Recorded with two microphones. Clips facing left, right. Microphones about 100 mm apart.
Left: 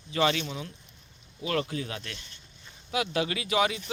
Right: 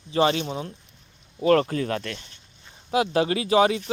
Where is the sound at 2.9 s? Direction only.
35° right (ahead or behind).